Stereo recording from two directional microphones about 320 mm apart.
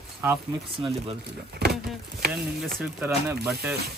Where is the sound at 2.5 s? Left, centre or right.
Centre.